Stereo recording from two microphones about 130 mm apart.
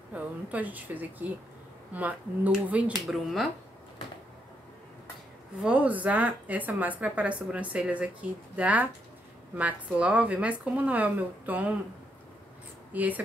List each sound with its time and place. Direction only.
0.1 s a woman's voice: 10° right (ahead or behind)
3.1 s speech: centre (ahead or behind)
5.6 s a woman's voice: 10° right (ahead or behind)
12.9 s a woman's voice: 10° right (ahead or behind)